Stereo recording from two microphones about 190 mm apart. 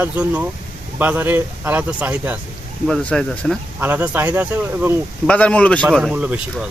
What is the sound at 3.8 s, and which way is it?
Speech, 10° right (ahead or behind).